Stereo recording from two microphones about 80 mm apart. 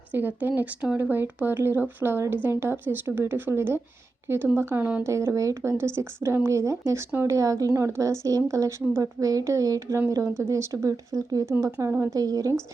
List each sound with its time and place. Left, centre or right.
0.1 s a woman's voice: right
12.1 s speech: right